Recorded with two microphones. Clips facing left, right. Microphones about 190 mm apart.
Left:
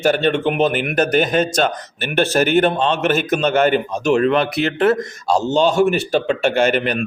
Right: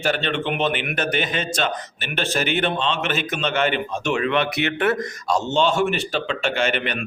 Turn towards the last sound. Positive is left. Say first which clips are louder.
# left 6 dB
turn(degrees=40)  # may be behind; listen again after turning